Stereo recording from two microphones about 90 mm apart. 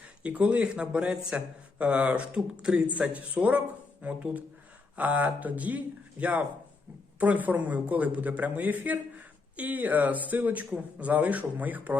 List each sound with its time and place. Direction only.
0.2 s a man's voice: 15° right (ahead or behind)